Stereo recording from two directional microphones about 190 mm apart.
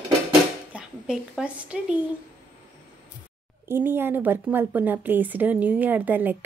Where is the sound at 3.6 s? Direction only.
10° right (ahead or behind).